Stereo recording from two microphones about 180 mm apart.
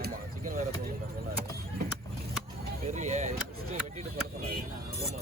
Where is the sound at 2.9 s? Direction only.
40° right (ahead or behind).